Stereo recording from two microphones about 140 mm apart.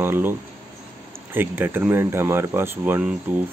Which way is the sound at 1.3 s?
15° right (ahead or behind).